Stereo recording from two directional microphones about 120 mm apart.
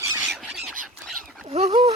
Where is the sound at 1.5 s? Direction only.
65° right (ahead or behind).